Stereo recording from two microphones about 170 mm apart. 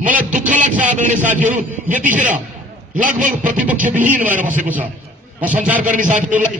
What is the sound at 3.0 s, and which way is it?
Speech, 50° right (ahead or behind).